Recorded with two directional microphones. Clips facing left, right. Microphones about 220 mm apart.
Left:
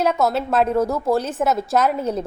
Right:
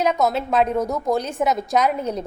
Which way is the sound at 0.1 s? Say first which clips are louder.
Left 1 dB; centre (ahead or behind).